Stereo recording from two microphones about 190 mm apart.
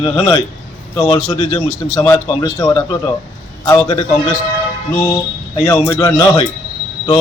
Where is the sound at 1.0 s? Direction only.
15° left (ahead or behind).